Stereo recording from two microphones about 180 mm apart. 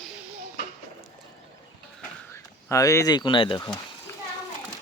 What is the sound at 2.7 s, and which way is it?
Speech, 15° left (ahead or behind).